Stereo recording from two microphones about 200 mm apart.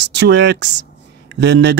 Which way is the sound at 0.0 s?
60° right (ahead or behind).